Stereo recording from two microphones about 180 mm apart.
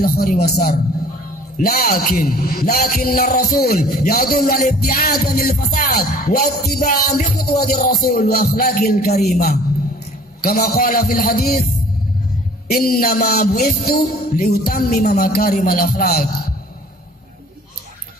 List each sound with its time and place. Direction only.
0.0 s a man's voice: 55° left (ahead or behind)
1.6 s music: 55° left (ahead or behind)
10.4 s music: 55° left (ahead or behind)
12.6 s music: 55° left (ahead or behind)